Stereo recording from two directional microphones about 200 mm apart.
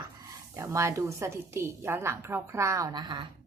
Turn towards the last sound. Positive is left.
turn(degrees=-20)  # may be behind; listen again after turning